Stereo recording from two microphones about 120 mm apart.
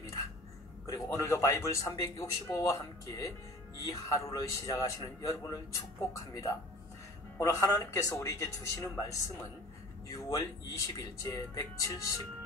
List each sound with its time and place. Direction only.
0.8 s speech: 30° left (ahead or behind)